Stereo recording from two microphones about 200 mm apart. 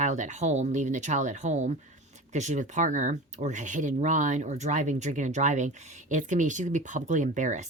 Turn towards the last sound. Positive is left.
turn(degrees=-40)  # may be behind; listen again after turning